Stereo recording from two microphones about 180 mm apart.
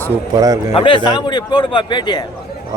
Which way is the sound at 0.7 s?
25° left (ahead or behind).